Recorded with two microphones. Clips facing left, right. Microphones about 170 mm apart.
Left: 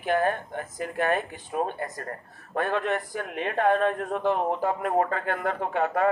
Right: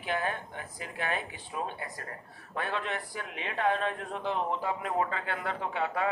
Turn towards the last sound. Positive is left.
turn(degrees=50)  # may be behind; listen again after turning